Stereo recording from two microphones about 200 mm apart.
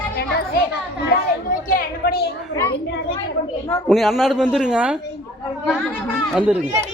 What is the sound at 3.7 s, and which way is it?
Speech, 10° left (ahead or behind).